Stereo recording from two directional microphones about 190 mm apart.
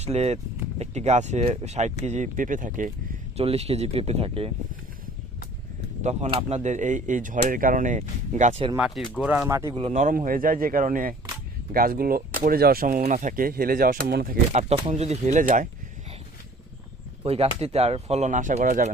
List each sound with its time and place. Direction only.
0.0 s speech: 35° right (ahead or behind)
6.0 s speech: 35° right (ahead or behind)
9.1 s speech: 5° right (ahead or behind)
9.7 s speech: 35° right (ahead or behind); by 14.3 s 55° right (ahead or behind)
14.5 s speech: 35° right (ahead or behind)
17.2 s speech: 35° right (ahead or behind)